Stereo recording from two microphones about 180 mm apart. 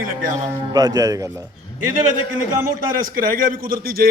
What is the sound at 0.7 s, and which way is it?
Speech, 20° right (ahead or behind).